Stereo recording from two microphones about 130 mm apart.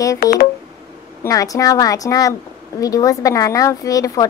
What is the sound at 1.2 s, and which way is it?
A woman's voice, 25° left (ahead or behind).